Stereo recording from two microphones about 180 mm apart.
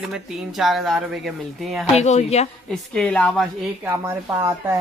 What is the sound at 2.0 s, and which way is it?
Speech, 40° left (ahead or behind).